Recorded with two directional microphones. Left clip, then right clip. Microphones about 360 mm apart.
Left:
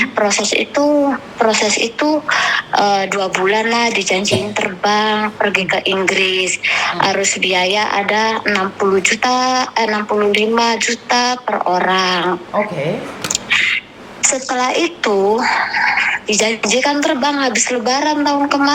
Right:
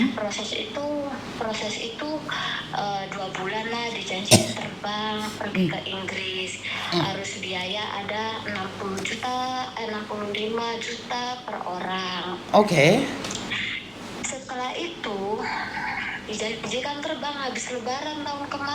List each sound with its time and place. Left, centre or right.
0.2 s a woman's voice: left
12.5 s speech: right
13.5 s a sound: left
14.2 s a woman's voice: left